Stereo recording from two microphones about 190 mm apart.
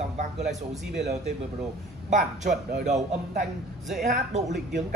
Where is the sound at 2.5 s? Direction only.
45° right (ahead or behind).